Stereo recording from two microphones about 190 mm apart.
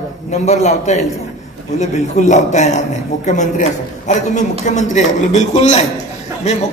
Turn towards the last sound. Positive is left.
turn(degrees=35)  # may be behind; listen again after turning